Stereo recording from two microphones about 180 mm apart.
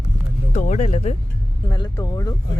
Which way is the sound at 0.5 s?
40° left (ahead or behind).